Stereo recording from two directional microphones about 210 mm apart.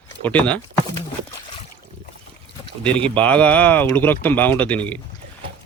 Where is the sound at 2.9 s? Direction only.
5° left (ahead or behind).